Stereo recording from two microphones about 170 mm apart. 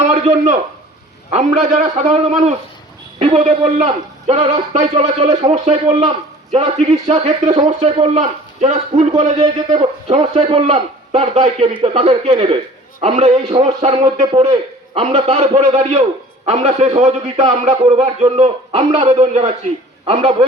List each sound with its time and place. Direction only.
0.0 s a man's voice: 45° right (ahead or behind)
1.7 s a man's voice: 40° right (ahead or behind)